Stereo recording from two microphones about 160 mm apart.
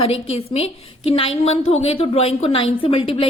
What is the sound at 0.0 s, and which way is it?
A woman's voice, 40° left (ahead or behind).